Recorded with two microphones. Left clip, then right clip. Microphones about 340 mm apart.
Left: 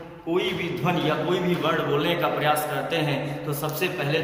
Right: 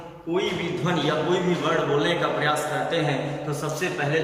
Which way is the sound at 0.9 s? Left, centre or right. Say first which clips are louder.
Even; centre.